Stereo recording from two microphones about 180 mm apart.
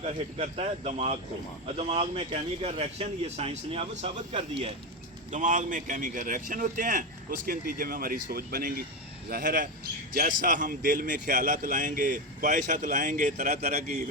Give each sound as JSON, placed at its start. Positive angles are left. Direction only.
{"t": 0.0, "sound": "speech", "side_deg": -40}
{"t": 5.3, "sound": "a man's voice", "side_deg": -45}